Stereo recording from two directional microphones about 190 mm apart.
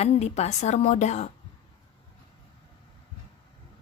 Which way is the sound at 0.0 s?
35° left (ahead or behind).